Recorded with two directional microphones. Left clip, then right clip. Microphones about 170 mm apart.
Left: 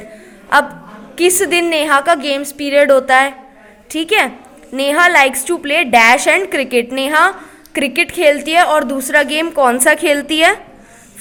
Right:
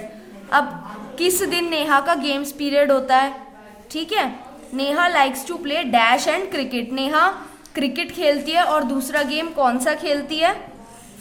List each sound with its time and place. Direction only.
1.1 s a woman's voice: 35° left (ahead or behind)